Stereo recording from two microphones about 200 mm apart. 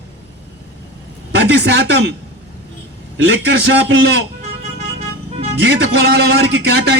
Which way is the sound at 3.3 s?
60° right (ahead or behind).